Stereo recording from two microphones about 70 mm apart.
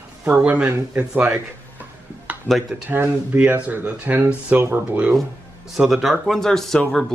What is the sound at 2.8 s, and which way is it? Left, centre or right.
Speech, right.